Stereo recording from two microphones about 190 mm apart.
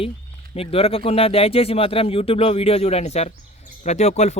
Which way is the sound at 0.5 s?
30° left (ahead or behind).